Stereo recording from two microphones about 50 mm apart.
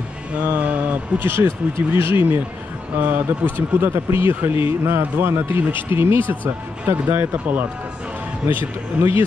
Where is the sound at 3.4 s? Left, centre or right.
Right.